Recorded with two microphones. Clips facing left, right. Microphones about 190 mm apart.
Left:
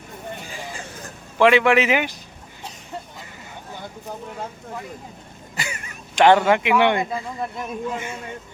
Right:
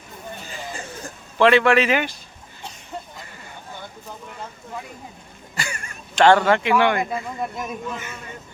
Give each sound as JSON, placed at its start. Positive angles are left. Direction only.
{"t": 1.4, "sound": "a man's voice", "side_deg": 15}
{"t": 5.5, "sound": "speech", "side_deg": 20}
{"t": 7.1, "sound": "speech", "side_deg": 0}
{"t": 7.9, "sound": "speech", "side_deg": 25}